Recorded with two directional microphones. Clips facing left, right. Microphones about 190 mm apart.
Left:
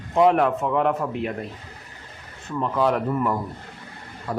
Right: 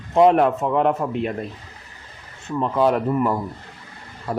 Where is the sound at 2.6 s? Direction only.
25° right (ahead or behind).